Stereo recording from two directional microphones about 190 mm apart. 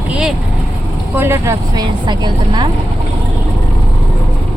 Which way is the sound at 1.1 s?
15° right (ahead or behind).